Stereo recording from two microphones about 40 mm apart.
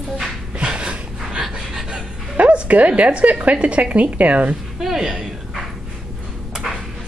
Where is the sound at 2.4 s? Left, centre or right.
Right.